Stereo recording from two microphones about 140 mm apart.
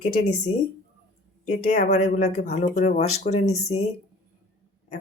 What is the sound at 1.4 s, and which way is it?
Speech, 60° left (ahead or behind).